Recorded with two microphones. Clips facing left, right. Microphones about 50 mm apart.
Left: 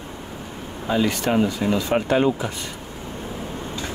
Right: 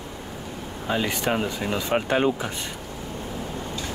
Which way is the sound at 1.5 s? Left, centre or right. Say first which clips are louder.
Left 4 dB; right.